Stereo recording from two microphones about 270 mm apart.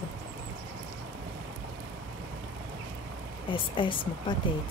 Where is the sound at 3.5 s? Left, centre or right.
Centre.